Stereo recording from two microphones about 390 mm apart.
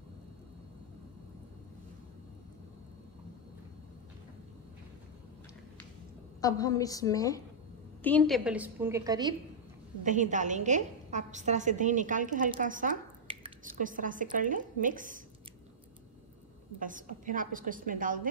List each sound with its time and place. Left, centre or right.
6.4 s a woman's voice: centre
16.8 s a woman's voice: centre